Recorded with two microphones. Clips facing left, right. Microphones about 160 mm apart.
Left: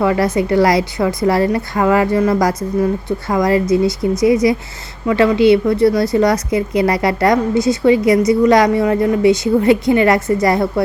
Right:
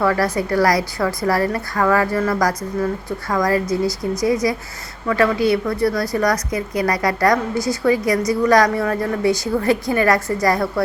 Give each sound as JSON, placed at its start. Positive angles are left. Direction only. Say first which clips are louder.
{"t": 0.0, "sound": "a woman's voice", "louder": "left 4 dB", "side_deg": 20}